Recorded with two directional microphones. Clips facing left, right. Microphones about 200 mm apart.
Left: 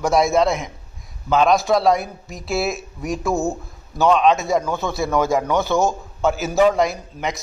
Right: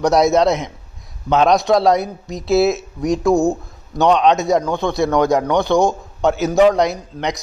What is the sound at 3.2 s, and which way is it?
Speech, 15° right (ahead or behind).